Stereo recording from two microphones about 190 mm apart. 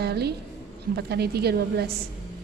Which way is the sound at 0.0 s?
60° right (ahead or behind).